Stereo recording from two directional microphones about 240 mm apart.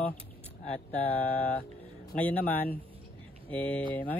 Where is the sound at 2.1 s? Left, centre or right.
Centre.